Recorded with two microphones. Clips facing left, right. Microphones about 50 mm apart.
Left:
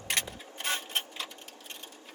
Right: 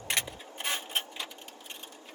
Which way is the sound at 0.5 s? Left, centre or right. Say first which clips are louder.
Even; centre.